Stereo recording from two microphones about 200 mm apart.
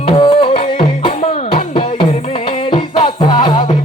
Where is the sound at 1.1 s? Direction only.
30° left (ahead or behind).